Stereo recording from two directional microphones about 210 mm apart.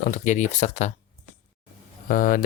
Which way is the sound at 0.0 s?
35° left (ahead or behind).